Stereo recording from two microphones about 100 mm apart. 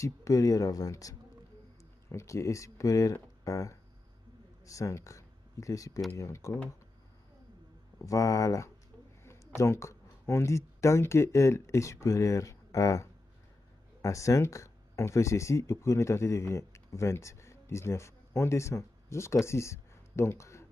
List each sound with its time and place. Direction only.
0.0 s speech: 35° left (ahead or behind)
8.0 s speech: 35° left (ahead or behind)
9.2 s a sound: 25° left (ahead or behind)
9.6 s speech: 30° left (ahead or behind)